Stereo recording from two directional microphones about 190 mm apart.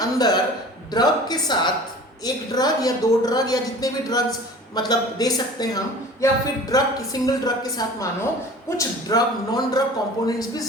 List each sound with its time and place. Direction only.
0.0 s a woman's voice: 20° left (ahead or behind)